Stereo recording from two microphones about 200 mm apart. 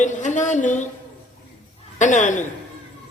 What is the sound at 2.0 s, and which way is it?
Speech, 40° left (ahead or behind).